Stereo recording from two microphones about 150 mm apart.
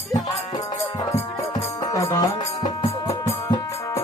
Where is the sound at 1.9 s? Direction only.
20° left (ahead or behind).